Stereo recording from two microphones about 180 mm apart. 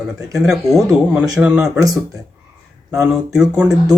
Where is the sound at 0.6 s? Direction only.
Centre (ahead or behind).